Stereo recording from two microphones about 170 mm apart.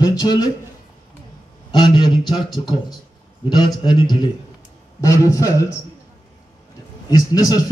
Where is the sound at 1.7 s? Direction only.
25° left (ahead or behind).